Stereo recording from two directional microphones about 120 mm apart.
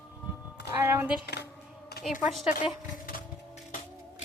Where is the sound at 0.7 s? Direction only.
20° right (ahead or behind).